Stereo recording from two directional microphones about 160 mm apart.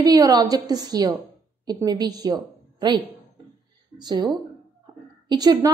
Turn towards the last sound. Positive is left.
turn(degrees=-25)  # may be behind; listen again after turning